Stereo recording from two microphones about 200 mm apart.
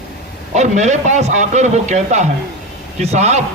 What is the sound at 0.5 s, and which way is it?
A man's voice, 35° right (ahead or behind).